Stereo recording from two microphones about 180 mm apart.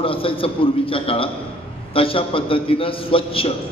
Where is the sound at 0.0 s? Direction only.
30° left (ahead or behind).